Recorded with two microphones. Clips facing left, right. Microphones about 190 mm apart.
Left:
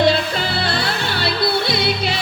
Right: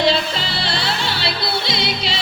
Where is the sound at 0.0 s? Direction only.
55° left (ahead or behind).